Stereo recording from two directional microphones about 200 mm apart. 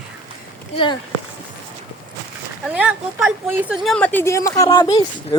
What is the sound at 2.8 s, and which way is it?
Speech, 5° right (ahead or behind).